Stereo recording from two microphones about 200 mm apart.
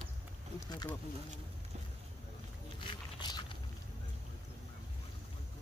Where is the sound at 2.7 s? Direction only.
25° left (ahead or behind).